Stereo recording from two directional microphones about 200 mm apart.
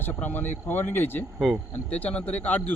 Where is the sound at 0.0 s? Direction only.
10° left (ahead or behind).